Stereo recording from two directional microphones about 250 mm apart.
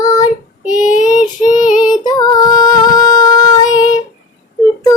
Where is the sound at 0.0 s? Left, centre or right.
Centre.